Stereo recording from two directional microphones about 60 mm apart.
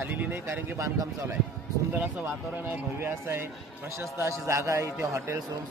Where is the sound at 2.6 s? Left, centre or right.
Right.